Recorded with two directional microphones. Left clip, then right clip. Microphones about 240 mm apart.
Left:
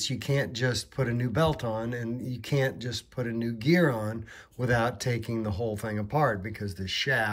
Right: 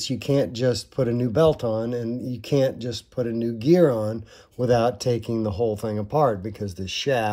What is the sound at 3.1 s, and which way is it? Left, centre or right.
Speech, centre.